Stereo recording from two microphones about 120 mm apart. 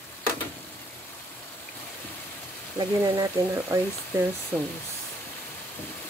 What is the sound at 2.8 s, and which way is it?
Speech, 30° right (ahead or behind).